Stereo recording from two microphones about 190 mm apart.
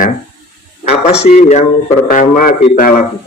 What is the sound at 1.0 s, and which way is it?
A man's voice, 35° left (ahead or behind).